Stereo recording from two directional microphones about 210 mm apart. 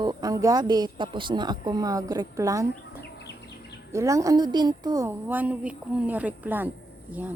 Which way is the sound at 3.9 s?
15° right (ahead or behind).